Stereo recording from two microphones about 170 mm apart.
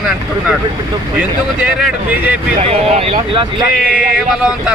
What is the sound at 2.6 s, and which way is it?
Speech, 35° right (ahead or behind).